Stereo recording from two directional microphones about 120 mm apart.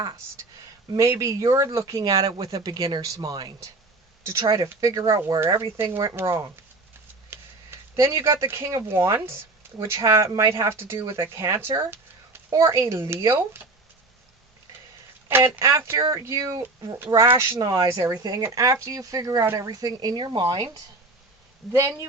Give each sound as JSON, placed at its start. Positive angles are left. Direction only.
{"t": 0.9, "sound": "speech", "side_deg": -25}
{"t": 15.3, "sound": "speech", "side_deg": -20}
{"t": 21.6, "sound": "speech", "side_deg": 0}